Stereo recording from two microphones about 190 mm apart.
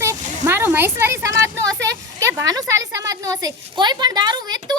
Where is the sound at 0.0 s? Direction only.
15° right (ahead or behind).